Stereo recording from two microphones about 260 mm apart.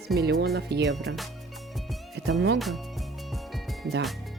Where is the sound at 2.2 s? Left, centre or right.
Right.